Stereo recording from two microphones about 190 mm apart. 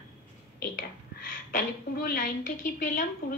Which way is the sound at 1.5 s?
50° left (ahead or behind).